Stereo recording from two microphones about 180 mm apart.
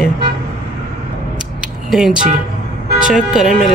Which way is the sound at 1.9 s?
5° right (ahead or behind).